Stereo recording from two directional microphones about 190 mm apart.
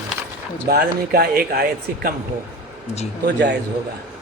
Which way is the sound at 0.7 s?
55° right (ahead or behind).